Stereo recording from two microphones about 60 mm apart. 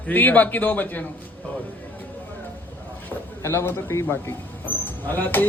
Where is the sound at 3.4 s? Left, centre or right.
Left.